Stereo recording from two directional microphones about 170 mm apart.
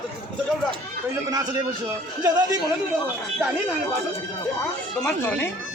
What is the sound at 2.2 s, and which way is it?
Speech, 25° right (ahead or behind).